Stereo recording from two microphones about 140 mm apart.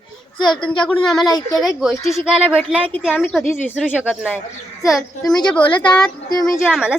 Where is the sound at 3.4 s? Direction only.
15° left (ahead or behind).